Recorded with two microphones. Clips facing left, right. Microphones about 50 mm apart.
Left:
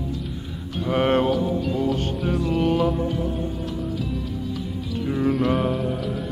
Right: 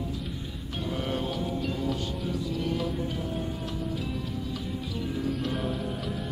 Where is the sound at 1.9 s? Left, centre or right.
Left.